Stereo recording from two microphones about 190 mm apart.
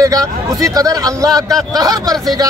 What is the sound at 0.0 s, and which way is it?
Speech, 20° right (ahead or behind).